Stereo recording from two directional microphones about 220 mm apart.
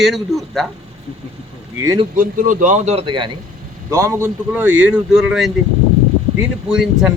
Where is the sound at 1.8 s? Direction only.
15° right (ahead or behind).